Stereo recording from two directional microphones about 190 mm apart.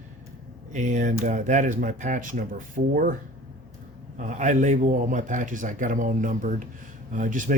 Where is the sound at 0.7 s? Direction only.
40° right (ahead or behind).